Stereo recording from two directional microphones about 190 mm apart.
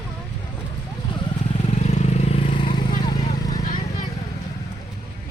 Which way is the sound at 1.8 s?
35° left (ahead or behind).